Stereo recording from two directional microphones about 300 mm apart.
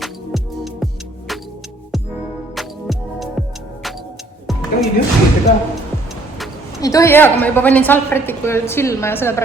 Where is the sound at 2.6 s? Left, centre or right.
Centre.